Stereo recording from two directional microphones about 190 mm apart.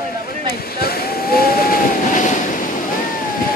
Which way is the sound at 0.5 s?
55° left (ahead or behind).